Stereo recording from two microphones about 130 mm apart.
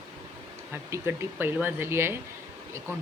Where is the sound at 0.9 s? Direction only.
20° right (ahead or behind).